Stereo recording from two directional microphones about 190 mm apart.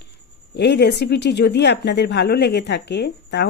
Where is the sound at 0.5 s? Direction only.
60° left (ahead or behind).